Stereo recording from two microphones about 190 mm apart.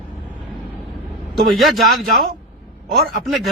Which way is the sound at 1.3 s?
Centre (ahead or behind).